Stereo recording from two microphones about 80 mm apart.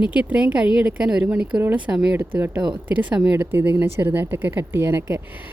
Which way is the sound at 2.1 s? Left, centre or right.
Right.